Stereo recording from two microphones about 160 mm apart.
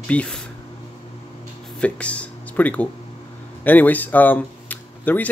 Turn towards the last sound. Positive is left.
turn(degrees=10)  # may be behind; listen again after turning